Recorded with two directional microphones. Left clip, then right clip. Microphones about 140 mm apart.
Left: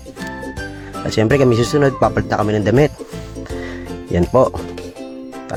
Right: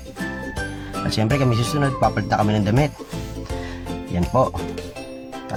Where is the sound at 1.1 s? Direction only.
55° left (ahead or behind).